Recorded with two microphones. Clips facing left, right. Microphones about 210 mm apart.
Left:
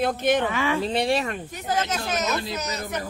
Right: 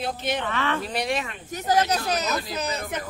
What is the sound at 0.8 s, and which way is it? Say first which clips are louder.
Speech: left 4 dB; 25° left (ahead or behind).